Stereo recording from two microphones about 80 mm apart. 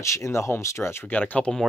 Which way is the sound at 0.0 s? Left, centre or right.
Left.